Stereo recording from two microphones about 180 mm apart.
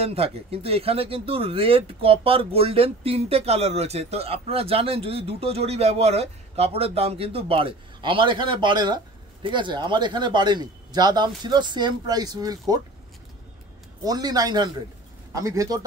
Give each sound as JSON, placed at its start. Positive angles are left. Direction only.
{"t": 0.0, "sound": "speech", "side_deg": -35}
{"t": 14.0, "sound": "speech", "side_deg": -20}